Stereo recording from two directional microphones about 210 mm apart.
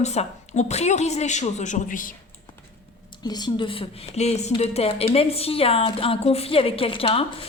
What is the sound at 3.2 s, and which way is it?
Speech, 20° left (ahead or behind).